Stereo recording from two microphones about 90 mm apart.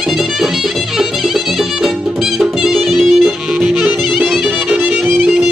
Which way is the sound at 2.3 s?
5° right (ahead or behind).